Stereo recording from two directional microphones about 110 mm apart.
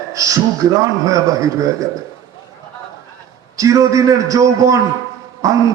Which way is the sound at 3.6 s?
30° right (ahead or behind).